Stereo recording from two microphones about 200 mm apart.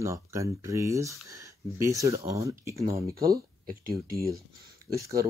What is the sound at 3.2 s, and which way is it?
Speech, 50° right (ahead or behind).